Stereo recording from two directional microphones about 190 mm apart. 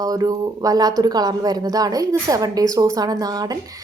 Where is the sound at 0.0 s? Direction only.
20° right (ahead or behind).